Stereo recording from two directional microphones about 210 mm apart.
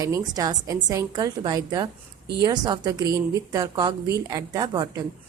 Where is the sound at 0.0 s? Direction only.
15° right (ahead or behind).